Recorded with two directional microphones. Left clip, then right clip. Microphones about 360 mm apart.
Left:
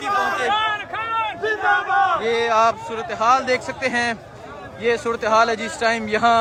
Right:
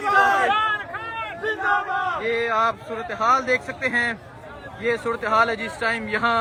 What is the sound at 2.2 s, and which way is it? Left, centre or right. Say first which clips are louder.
Speech: left 4 dB; centre.